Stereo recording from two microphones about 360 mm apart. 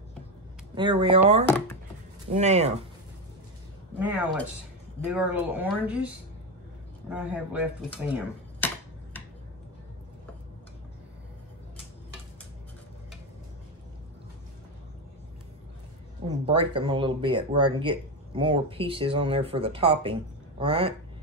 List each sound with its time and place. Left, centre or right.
0.7 s speech: centre
1.4 s speech: centre
2.3 s speech: centre
4.0 s speech: centre
16.4 s speech: centre